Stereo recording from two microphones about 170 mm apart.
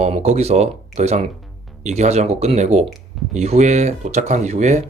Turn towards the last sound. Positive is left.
turn(degrees=-45)  # may be behind; listen again after turning